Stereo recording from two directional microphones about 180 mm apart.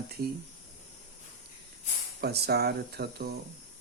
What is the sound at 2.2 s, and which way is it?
Speech, 65° right (ahead or behind).